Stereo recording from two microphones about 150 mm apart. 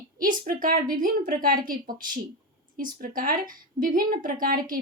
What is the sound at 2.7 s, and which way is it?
A woman's voice, 65° right (ahead or behind).